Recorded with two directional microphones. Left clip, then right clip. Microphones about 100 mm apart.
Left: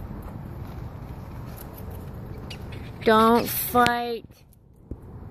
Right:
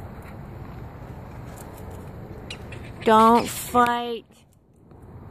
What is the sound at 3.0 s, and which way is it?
Speech, 15° right (ahead or behind).